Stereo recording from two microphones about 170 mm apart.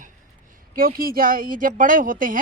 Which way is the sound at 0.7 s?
60° right (ahead or behind).